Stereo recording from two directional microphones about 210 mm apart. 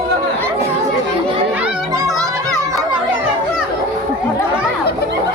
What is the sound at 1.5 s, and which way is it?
Children playing, 5° right (ahead or behind).